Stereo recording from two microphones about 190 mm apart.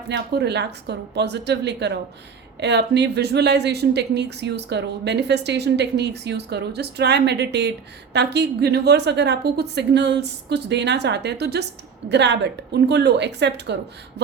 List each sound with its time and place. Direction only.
0.1 s speech: 65° right (ahead or behind)